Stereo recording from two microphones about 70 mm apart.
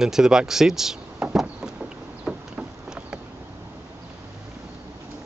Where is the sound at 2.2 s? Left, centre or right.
Centre.